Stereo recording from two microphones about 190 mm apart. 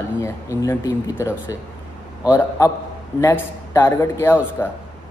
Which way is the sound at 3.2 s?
15° left (ahead or behind).